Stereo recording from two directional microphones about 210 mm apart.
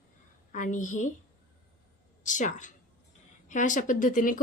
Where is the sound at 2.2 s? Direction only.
35° left (ahead or behind).